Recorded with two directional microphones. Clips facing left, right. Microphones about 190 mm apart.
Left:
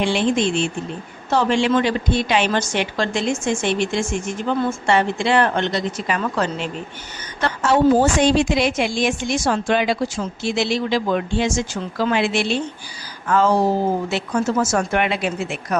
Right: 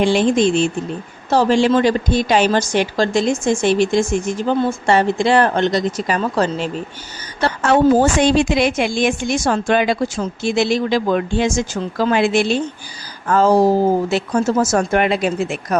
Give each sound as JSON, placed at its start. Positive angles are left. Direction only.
{"t": 0.0, "sound": "a woman's voice", "side_deg": -40}
{"t": 8.2, "sound": "a woman's voice", "side_deg": -60}